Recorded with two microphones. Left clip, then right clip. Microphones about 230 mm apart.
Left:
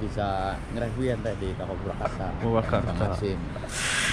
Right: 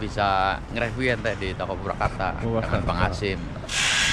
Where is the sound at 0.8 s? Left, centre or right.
Centre.